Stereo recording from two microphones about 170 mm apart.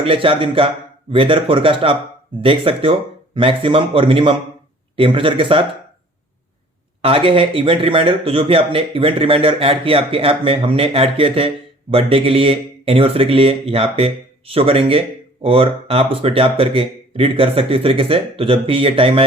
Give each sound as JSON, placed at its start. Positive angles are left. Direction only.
{"t": 0.0, "sound": "speech", "side_deg": -30}
{"t": 7.0, "sound": "speech", "side_deg": -30}